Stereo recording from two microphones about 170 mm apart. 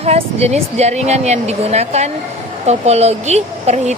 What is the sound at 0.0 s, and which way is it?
A woman's voice, 35° right (ahead or behind).